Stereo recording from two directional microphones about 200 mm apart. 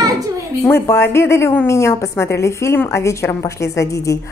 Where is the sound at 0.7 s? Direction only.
10° left (ahead or behind).